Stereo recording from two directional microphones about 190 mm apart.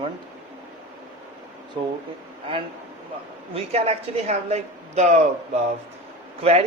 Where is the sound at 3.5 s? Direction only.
30° right (ahead or behind).